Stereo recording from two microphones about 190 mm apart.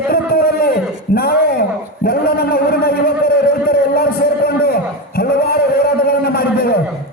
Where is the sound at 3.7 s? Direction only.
55° left (ahead or behind).